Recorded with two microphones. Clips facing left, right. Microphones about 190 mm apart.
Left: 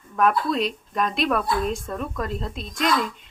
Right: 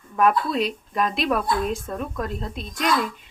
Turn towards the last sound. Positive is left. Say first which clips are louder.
# even
turn(degrees=0)  # may be behind; listen again after turning